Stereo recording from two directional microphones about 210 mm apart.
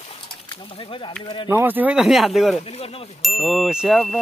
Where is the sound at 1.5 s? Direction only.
10° right (ahead or behind).